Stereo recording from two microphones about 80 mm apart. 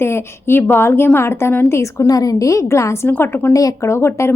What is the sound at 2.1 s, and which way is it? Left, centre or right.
A woman's voice, left.